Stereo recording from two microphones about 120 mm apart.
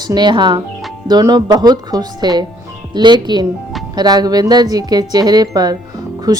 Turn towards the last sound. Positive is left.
turn(degrees=-30)  # may be behind; listen again after turning